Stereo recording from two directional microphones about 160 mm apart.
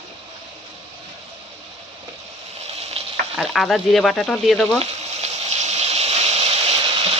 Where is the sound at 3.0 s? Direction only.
40° right (ahead or behind).